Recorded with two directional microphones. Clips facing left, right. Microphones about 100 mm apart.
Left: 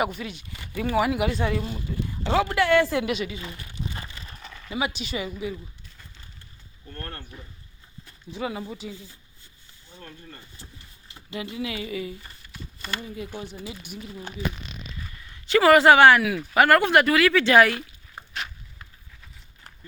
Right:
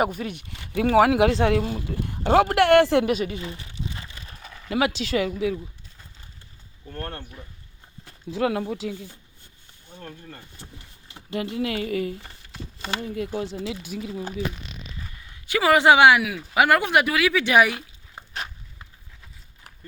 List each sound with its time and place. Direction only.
0.2 s speech: 55° right (ahead or behind)
0.7 s speech: 85° right; by 3.1 s 65° right (ahead or behind)
3.1 s speech: 40° right (ahead or behind)
4.3 s a sound: 5° right (ahead or behind)
4.7 s speech: 85° right
8.0 s speech: 85° right; by 9.1 s 65° right (ahead or behind)
9.9 s speech: 55° right (ahead or behind)
11.3 s speech: 55° right (ahead or behind)
13.4 s speech: 90° right
15.4 s speech: 10° right (ahead or behind)